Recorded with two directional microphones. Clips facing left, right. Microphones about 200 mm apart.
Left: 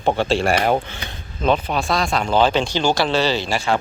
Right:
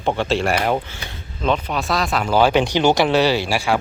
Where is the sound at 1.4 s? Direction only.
40° left (ahead or behind).